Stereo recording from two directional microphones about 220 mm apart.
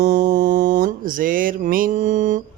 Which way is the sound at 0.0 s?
35° right (ahead or behind).